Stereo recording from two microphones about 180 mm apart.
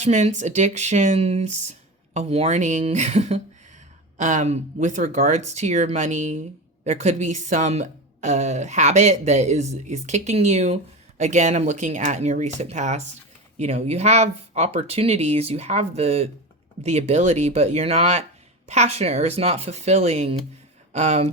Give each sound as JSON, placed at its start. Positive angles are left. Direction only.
{"t": 0.0, "sound": "a woman's voice", "side_deg": -40}